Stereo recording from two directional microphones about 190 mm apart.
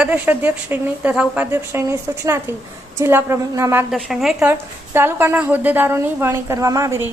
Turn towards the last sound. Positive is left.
turn(degrees=-15)  # may be behind; listen again after turning